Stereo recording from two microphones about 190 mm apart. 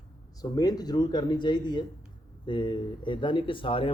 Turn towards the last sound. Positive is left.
turn(degrees=30)  # may be behind; listen again after turning